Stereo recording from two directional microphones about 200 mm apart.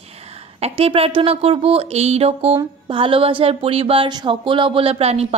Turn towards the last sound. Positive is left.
turn(degrees=-30)  # may be behind; listen again after turning